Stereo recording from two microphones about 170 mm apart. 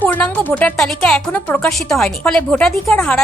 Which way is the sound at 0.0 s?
10° left (ahead or behind).